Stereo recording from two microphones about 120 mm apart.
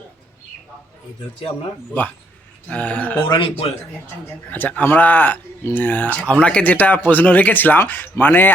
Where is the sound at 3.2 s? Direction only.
45° left (ahead or behind).